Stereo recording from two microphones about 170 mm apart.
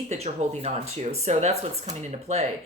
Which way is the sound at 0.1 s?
40° right (ahead or behind).